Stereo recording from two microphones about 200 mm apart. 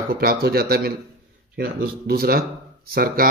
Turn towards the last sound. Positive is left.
turn(degrees=-50)  # may be behind; listen again after turning